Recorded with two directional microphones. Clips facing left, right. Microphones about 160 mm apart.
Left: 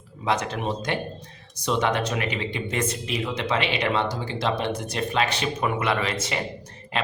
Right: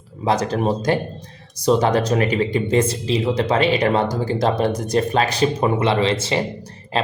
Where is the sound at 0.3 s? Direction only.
35° right (ahead or behind).